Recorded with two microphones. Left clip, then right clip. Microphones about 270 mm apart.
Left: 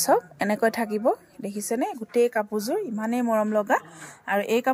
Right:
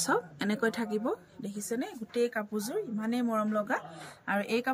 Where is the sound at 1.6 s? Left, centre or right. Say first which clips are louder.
Left 9 dB; centre.